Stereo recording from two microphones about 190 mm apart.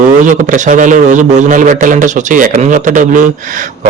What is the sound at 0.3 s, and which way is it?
A man's voice, 40° right (ahead or behind).